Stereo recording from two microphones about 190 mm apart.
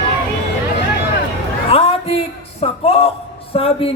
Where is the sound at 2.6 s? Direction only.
30° left (ahead or behind).